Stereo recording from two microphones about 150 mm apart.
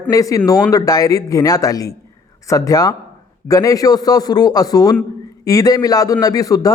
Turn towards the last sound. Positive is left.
turn(degrees=25)  # may be behind; listen again after turning